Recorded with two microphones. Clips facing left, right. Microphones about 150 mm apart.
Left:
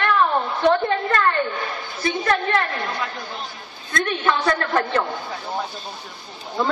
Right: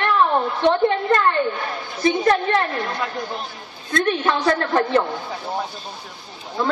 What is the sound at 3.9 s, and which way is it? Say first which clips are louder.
Speech: right 2 dB; 35° right (ahead or behind).